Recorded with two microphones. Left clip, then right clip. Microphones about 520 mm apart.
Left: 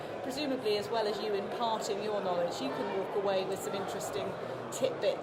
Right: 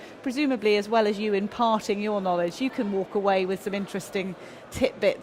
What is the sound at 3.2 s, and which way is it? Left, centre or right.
A woman's voice, right.